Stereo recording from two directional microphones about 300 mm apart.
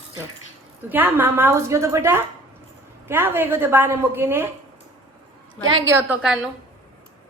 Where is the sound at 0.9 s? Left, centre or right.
Centre.